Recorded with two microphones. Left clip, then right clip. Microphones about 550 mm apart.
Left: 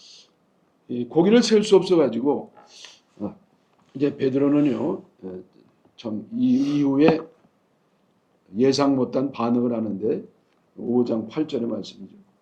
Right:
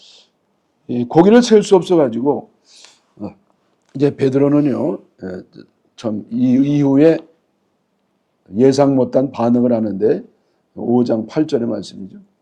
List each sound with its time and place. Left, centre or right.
0.0 s a sound: right
0.9 s speech: right
2.6 s a sound: right
3.9 s speech: right
5.2 s speech: right
8.5 s speech: right